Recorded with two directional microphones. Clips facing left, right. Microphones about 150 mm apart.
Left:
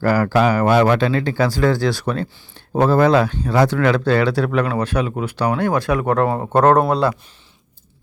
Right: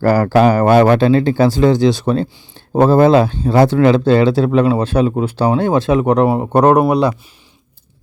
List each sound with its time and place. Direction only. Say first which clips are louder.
0.0 s speech: right 5 dB; 35° right (ahead or behind); by 7.2 s 10° right (ahead or behind)